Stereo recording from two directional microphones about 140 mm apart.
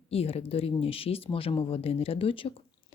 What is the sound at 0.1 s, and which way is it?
A woman's voice, 45° left (ahead or behind).